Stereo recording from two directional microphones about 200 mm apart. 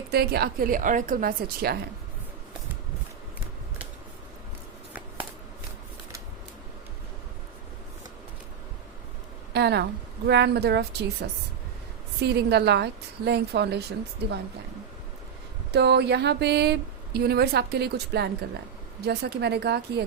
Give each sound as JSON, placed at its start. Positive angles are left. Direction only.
{"t": 0.1, "sound": "a woman's voice", "side_deg": -50}
{"t": 9.5, "sound": "speech", "side_deg": -55}
{"t": 15.7, "sound": "speech", "side_deg": -55}